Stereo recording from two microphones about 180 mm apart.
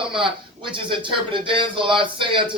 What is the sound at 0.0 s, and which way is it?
Speech, 30° right (ahead or behind).